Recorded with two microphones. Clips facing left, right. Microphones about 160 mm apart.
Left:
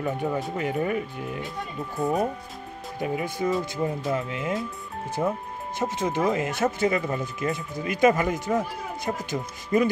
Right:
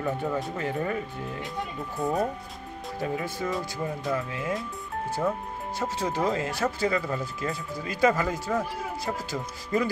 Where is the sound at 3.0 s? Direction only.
15° left (ahead or behind).